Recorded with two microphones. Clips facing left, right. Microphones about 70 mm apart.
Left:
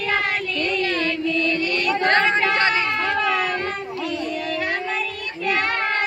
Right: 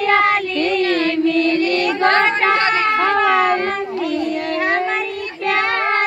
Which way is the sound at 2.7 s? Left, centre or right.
Right.